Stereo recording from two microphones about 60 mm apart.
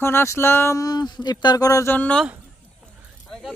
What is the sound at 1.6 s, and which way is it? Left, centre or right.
Speech, left.